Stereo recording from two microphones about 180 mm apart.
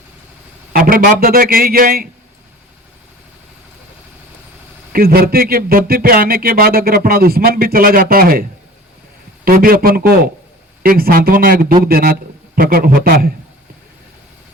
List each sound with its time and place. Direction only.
0.7 s speech: 55° right (ahead or behind)
4.9 s speech: 55° right (ahead or behind)